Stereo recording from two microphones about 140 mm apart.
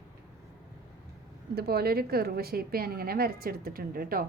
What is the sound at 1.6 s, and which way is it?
A woman's voice, 90° right.